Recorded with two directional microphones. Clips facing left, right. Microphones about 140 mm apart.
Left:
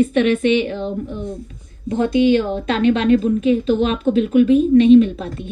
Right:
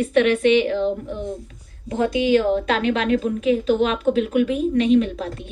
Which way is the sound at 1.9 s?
30° left (ahead or behind).